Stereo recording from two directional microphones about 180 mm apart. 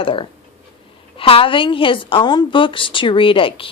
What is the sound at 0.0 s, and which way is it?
A woman's voice, 30° left (ahead or behind).